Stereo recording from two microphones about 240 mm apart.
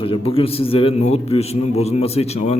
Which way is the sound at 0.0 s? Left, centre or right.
Left.